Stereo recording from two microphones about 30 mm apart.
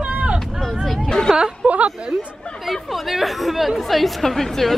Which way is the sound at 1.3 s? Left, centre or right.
Right.